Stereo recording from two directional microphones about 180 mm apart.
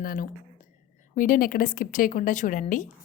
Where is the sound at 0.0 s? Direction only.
55° left (ahead or behind).